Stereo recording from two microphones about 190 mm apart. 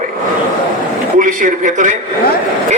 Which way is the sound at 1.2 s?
45° right (ahead or behind).